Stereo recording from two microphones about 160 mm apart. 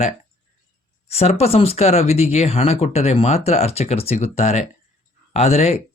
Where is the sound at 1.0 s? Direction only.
40° left (ahead or behind).